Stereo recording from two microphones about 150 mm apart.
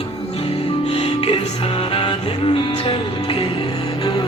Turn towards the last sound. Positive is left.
turn(degrees=30)  # may be behind; listen again after turning